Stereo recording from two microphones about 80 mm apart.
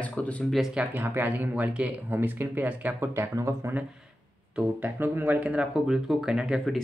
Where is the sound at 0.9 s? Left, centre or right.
Right.